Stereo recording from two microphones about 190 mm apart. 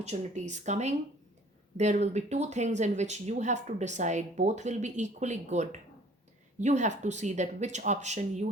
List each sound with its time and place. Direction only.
0.0 s speech: 40° right (ahead or behind)